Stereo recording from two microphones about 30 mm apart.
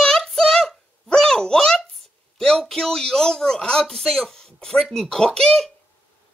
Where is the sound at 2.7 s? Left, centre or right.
Left.